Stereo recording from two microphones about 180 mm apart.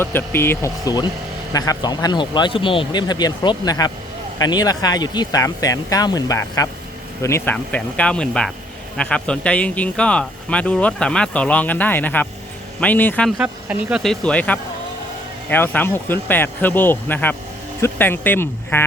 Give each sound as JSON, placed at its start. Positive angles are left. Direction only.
{"t": 0.0, "sound": "speech", "side_deg": 10}
{"t": 13.4, "sound": "speech", "side_deg": -5}